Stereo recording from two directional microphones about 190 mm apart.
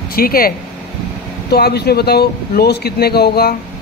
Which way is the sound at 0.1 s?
50° left (ahead or behind).